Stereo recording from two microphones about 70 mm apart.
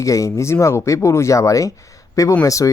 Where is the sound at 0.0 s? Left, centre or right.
Left.